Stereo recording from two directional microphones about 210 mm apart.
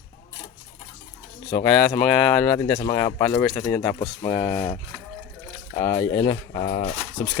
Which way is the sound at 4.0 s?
20° left (ahead or behind).